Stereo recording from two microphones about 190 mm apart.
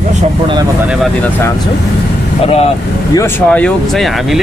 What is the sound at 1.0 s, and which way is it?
Speech, 10° left (ahead or behind).